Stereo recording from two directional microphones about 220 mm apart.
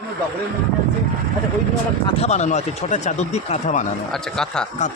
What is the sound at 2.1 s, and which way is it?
Speech, 25° left (ahead or behind).